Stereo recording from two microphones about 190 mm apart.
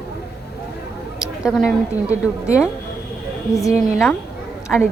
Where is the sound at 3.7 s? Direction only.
40° right (ahead or behind).